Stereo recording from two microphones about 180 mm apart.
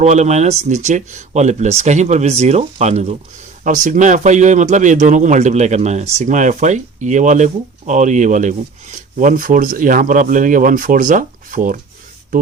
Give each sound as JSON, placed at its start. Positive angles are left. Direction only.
{"t": 0.0, "sound": "speech", "side_deg": -40}